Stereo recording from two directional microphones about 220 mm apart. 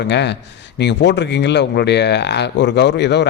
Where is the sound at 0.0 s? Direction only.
50° left (ahead or behind).